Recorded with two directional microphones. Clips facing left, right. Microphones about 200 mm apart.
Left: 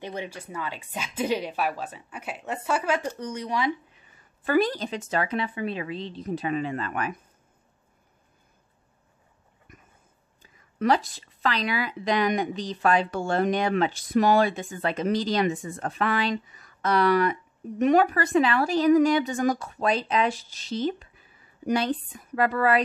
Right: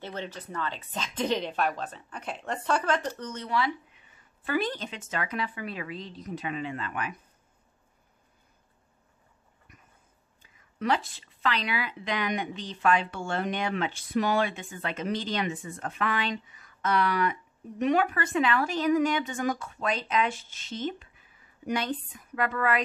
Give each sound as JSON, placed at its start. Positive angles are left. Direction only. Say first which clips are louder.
{"t": 0.0, "sound": "speech", "louder": "left 3 dB", "side_deg": 10}
{"t": 4.5, "sound": "speech", "louder": "left 6 dB", "side_deg": 40}
{"t": 9.7, "sound": "a sound", "louder": "left 5 dB", "side_deg": 45}
{"t": 10.8, "sound": "speech", "louder": "left 5 dB", "side_deg": 40}